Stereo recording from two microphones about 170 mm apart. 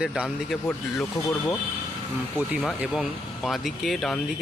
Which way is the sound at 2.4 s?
5° right (ahead or behind).